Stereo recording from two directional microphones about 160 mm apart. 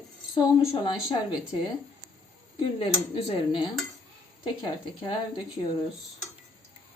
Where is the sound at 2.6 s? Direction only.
30° left (ahead or behind).